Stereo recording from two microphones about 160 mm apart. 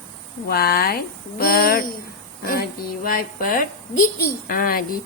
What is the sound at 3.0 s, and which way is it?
Speech, 65° left (ahead or behind).